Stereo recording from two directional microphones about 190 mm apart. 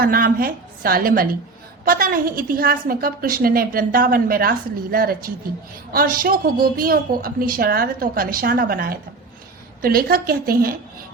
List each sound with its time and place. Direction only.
0.0 s a woman's voice: 50° right (ahead or behind)